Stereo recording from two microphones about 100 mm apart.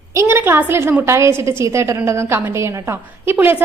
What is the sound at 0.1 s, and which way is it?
A woman's voice, 25° right (ahead or behind).